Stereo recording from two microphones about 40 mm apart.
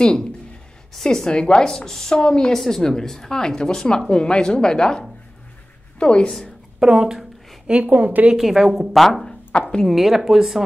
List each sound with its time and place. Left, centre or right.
0.0 s a woman's voice: centre
6.8 s speech: centre
7.7 s a woman's voice: right
8.4 s a woman's voice: centre
8.9 s a woman's voice: centre
9.5 s speech: left
9.8 s speech: centre